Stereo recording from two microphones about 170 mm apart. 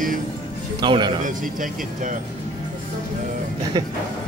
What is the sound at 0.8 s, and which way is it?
Speech, 25° right (ahead or behind).